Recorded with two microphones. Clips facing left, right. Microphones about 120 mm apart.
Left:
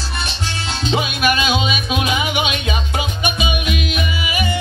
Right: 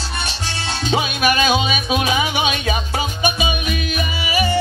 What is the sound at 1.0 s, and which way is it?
Music, 30° right (ahead or behind).